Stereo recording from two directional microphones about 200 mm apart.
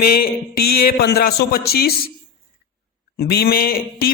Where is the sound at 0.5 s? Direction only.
50° left (ahead or behind).